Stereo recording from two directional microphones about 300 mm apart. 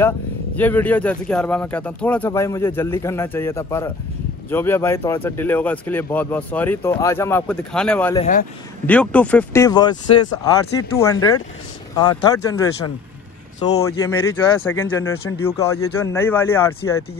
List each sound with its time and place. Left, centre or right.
0.6 s speech: centre
8.2 s speech: left
8.8 s speech: centre; by 13.8 s left
13.8 s speech: centre